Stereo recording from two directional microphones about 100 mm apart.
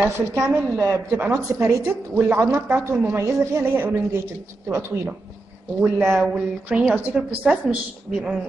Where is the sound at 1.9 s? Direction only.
20° right (ahead or behind).